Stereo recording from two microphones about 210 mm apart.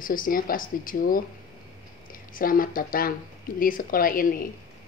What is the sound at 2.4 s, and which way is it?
Speech, 40° left (ahead or behind).